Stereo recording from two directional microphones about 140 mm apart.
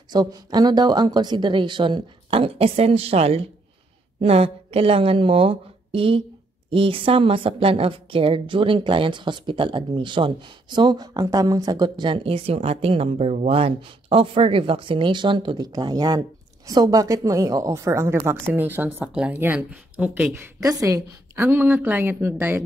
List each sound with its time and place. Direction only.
0.1 s a woman's voice: 30° right (ahead or behind); by 20.3 s 5° right (ahead or behind)
20.3 s speech: 25° right (ahead or behind)